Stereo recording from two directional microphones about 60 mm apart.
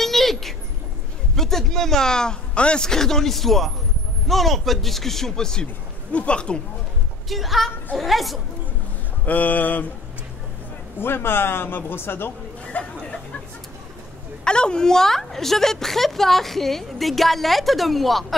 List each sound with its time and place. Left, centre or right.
0.0 s a sound: centre
1.3 s a man's voice: centre
7.2 s a woman's voice: centre
9.2 s mantra: left
11.0 s speech: left
12.6 s chatter: centre
14.4 s a woman's voice: centre